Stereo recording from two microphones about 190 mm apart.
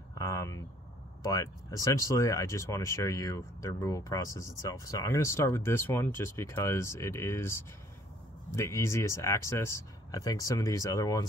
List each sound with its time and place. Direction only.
0.1 s speech: 15° left (ahead or behind)